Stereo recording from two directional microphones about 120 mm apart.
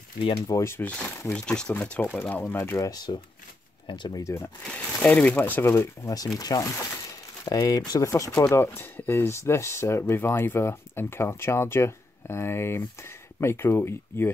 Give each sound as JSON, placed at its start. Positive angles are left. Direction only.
{"t": 0.5, "sound": "speech", "side_deg": 25}
{"t": 2.9, "sound": "speech", "side_deg": 35}
{"t": 4.2, "sound": "speech", "side_deg": 25}
{"t": 4.6, "sound": "speech", "side_deg": 10}